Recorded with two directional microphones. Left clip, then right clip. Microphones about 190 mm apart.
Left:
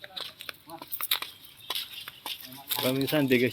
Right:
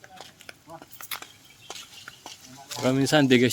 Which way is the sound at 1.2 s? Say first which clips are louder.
Left 5 dB; 35° left (ahead or behind).